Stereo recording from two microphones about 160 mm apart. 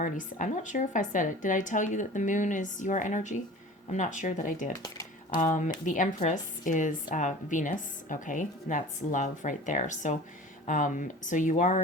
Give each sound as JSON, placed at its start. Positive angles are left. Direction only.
{"t": 0.0, "sound": "a woman's voice", "side_deg": 50}
{"t": 4.8, "sound": "a sound", "side_deg": 30}
{"t": 5.4, "sound": "a woman's voice", "side_deg": 50}